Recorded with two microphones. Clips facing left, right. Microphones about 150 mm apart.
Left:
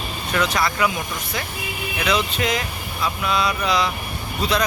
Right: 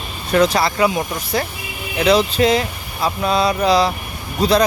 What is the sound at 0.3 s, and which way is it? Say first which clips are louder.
Speech: right 7 dB; 35° right (ahead or behind).